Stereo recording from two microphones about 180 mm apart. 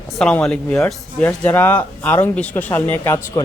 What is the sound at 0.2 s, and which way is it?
Speech, 5° left (ahead or behind).